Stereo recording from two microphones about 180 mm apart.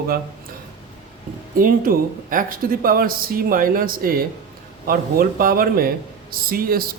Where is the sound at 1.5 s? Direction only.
50° right (ahead or behind).